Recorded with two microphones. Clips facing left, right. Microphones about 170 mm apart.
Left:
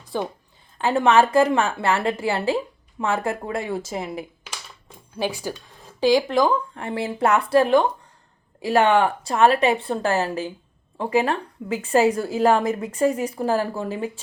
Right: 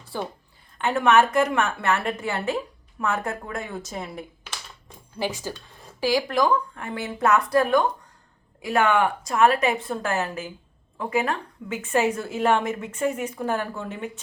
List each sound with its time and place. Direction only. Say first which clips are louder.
0.1 s a woman's voice: left 4 dB; 20° left (ahead or behind)
0.8 s speech: left 2 dB; 30° left (ahead or behind)
4.2 s a sound: left 3 dB; 5° left (ahead or behind)
5.2 s a woman's voice: left 3 dB; 15° left (ahead or behind); by 14.1 s 30° left (ahead or behind)